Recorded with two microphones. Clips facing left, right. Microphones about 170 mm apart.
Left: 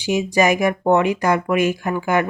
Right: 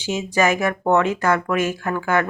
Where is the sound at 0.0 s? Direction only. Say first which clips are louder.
Left 3 dB; 15° left (ahead or behind).